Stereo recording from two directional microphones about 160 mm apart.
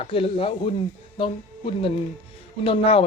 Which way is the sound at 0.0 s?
35° left (ahead or behind).